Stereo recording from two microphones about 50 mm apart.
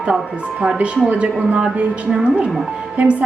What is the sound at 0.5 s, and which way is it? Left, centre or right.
A woman's voice, right.